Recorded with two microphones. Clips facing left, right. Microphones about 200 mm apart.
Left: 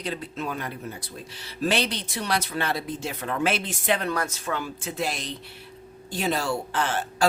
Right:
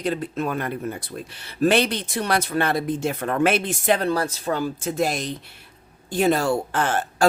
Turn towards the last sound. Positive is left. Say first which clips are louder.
# right 4 dB
turn(degrees=-50)  # may be behind; listen again after turning